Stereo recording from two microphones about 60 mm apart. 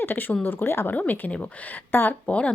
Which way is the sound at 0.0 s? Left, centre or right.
Left.